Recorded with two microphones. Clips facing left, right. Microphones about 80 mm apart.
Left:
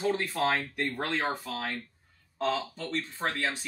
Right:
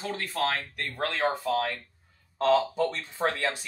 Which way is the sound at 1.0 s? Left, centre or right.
Centre.